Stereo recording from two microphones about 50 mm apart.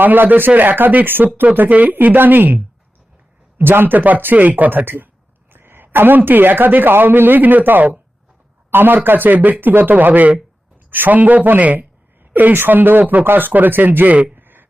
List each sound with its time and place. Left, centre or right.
0.0 s speech: right
5.5 s a woman's voice: right